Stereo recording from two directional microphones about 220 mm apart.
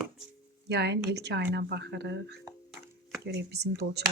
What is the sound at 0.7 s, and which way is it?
Speech, 50° right (ahead or behind).